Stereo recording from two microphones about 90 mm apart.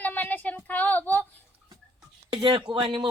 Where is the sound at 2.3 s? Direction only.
70° right (ahead or behind).